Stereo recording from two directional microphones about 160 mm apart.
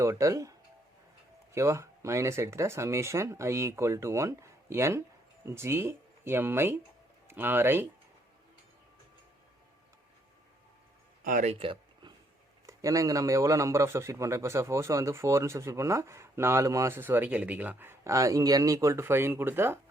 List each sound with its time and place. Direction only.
0.0 s speech: 20° right (ahead or behind)
1.5 s speech: 20° right (ahead or behind)
11.2 s speech: 55° right (ahead or behind)
11.5 s a sound: 35° right (ahead or behind)
12.6 s speech: 20° right (ahead or behind)